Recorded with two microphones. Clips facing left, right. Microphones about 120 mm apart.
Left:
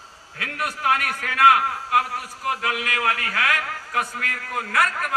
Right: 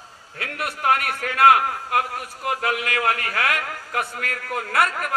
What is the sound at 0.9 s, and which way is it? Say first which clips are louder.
Speech: right 4 dB; 55° right (ahead or behind).